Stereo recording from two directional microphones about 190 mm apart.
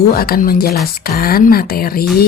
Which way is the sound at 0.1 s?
50° left (ahead or behind).